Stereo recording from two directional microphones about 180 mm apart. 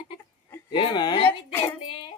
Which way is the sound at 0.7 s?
25° left (ahead or behind).